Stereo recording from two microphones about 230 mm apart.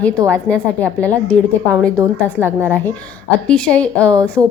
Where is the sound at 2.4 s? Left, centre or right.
Centre.